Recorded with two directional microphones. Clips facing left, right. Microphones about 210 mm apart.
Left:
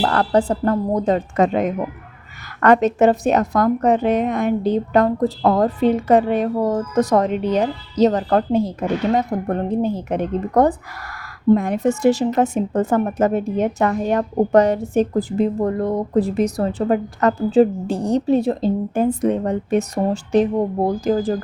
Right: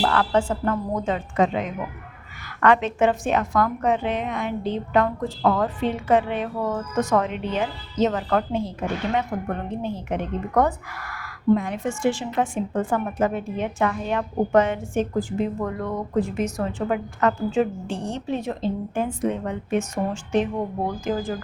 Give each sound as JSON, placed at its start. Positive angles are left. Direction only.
{"t": 0.0, "sound": "a woman's voice", "side_deg": 40}